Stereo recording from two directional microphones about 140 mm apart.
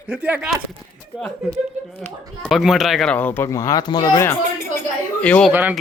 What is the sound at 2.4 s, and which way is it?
Speech, centre (ahead or behind).